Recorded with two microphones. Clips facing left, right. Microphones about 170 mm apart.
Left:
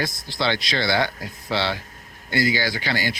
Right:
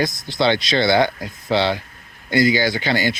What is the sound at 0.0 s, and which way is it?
Speech, 20° right (ahead or behind).